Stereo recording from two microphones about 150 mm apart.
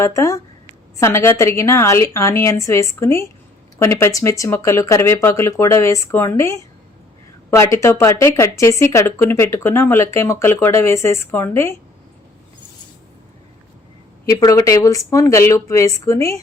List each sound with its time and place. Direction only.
0.0 s speech: 20° left (ahead or behind)
14.3 s speech: 20° left (ahead or behind)